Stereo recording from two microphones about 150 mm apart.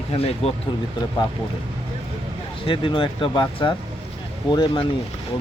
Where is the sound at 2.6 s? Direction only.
35° left (ahead or behind).